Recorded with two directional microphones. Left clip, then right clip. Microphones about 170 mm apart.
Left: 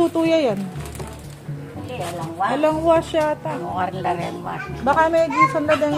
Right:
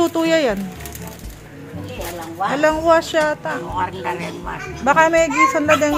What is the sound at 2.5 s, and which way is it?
A woman's voice, centre (ahead or behind).